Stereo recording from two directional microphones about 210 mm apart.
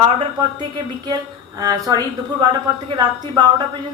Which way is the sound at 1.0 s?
15° right (ahead or behind).